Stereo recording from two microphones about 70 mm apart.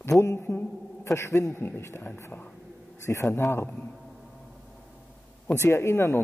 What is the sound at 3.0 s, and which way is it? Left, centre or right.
Speech, left.